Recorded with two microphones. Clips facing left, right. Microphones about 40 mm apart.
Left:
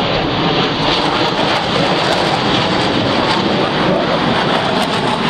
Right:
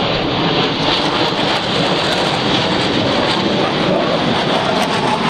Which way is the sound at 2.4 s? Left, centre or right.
Centre.